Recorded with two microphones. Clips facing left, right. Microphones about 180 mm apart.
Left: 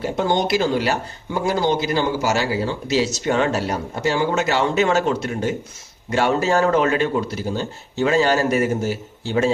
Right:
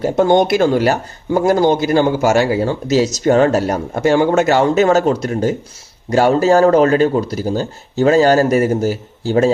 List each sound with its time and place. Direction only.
0.0 s speech: 50° right (ahead or behind)